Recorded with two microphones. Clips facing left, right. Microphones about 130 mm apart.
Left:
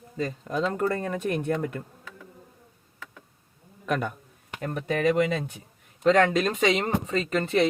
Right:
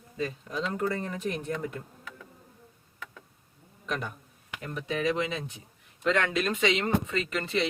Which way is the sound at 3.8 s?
55° left (ahead or behind).